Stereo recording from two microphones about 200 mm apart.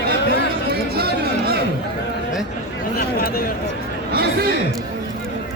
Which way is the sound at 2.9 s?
50° left (ahead or behind).